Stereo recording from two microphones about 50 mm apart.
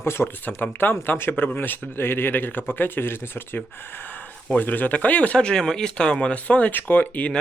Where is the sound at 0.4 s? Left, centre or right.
Left.